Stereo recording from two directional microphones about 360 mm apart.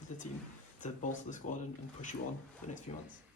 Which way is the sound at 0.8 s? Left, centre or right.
Left.